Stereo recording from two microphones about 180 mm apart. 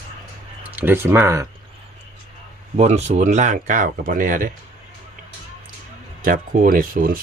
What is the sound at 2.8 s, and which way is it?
Speech, 35° right (ahead or behind).